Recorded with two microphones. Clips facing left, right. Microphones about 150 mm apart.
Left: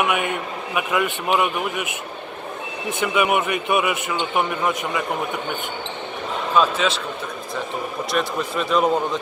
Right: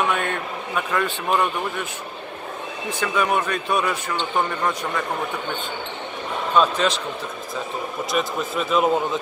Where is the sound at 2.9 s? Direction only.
20° left (ahead or behind).